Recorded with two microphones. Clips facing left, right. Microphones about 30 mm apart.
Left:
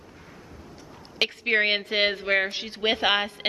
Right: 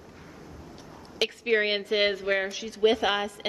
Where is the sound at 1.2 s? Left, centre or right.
Left.